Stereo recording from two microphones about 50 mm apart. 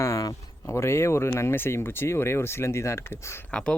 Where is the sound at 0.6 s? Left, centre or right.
Left.